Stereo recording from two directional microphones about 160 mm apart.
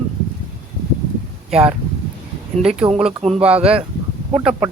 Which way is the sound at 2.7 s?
40° right (ahead or behind).